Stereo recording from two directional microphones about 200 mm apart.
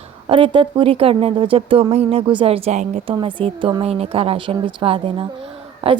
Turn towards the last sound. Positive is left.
turn(degrees=-30)  # may be behind; listen again after turning